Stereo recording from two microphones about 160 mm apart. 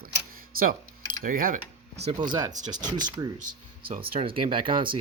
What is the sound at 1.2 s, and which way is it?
Speech, 60° right (ahead or behind).